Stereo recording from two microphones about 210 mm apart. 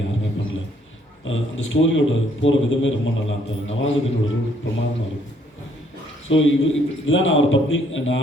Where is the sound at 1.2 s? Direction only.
65° left (ahead or behind).